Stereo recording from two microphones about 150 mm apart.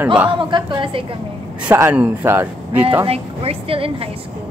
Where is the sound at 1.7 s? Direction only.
15° right (ahead or behind).